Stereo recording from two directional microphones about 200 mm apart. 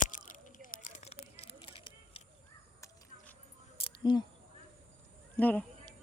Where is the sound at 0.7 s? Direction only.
40° left (ahead or behind).